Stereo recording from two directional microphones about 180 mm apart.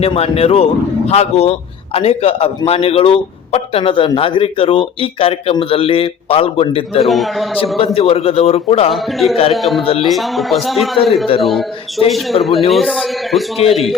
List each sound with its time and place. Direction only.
0.0 s a man's voice: 30° left (ahead or behind)
7.1 s a man's voice: centre (ahead or behind)
7.9 s a man's voice: 30° left (ahead or behind)
8.9 s a man's voice: centre (ahead or behind)